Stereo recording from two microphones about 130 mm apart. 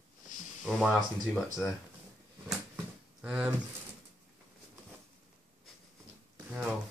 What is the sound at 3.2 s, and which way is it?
Speech, 10° right (ahead or behind).